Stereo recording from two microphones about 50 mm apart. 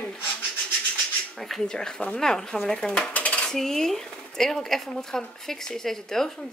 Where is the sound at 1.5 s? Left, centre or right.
Centre.